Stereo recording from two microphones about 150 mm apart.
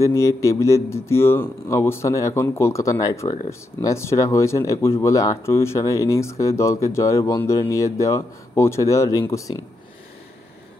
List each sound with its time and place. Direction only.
0.0 s speech: 20° left (ahead or behind)